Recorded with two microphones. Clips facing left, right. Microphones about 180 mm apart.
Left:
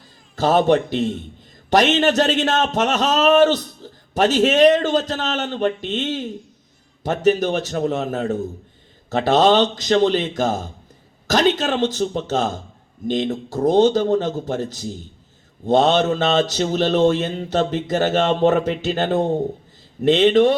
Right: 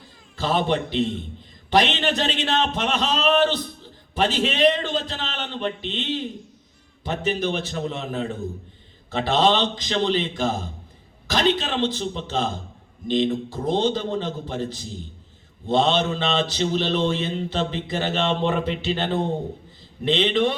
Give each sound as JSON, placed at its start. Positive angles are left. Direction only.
{"t": 0.3, "sound": "a man's voice", "side_deg": 45}